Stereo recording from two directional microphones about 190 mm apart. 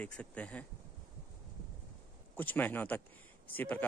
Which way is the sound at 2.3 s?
10° left (ahead or behind).